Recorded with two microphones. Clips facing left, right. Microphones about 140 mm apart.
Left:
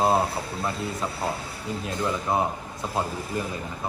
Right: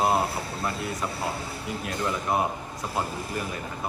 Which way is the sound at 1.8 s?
25° left (ahead or behind).